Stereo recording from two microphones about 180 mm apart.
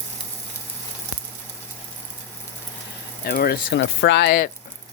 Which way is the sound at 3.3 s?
60° left (ahead or behind).